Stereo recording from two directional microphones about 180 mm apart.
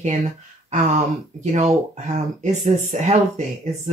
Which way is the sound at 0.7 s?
40° right (ahead or behind).